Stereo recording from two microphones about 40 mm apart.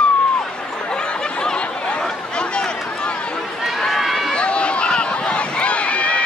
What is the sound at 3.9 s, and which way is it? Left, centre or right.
Run, centre.